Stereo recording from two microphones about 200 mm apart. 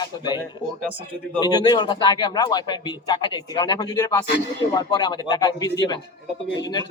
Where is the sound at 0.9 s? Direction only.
25° right (ahead or behind).